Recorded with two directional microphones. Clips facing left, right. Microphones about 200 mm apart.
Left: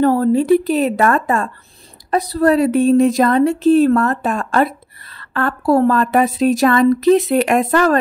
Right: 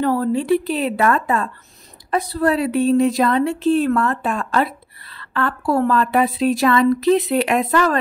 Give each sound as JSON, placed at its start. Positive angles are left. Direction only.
{"t": 0.0, "sound": "a woman's voice", "side_deg": 45}